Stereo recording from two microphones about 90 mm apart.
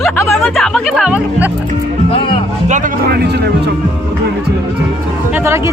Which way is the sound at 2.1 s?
90° left.